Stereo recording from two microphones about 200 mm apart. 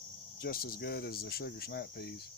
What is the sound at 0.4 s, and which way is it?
Speech, 50° left (ahead or behind).